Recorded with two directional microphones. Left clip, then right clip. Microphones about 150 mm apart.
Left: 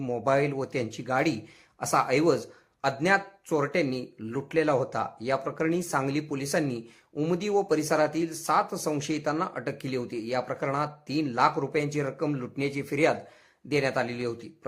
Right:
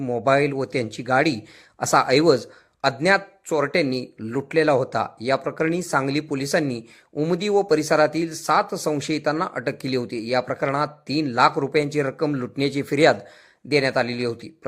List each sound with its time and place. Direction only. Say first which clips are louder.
0.3 s speech: right 6 dB; 25° right (ahead or behind)